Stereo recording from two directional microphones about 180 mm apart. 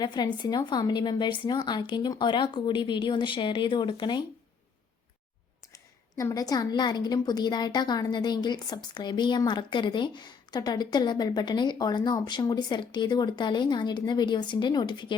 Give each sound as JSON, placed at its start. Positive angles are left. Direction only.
{"t": 0.0, "sound": "a woman's voice", "side_deg": 25}
{"t": 5.7, "sound": "a woman's voice", "side_deg": 20}